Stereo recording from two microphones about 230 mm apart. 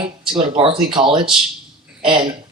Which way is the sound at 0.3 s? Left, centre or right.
Right.